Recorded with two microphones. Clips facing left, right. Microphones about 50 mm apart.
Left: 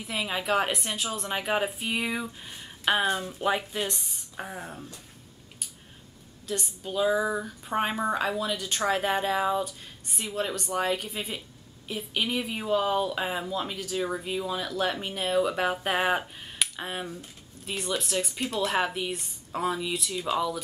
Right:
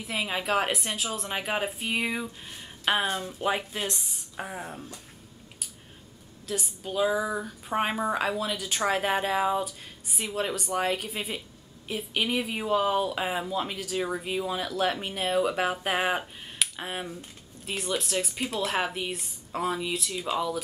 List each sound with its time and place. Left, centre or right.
0.0 s speech: centre
6.4 s speech: centre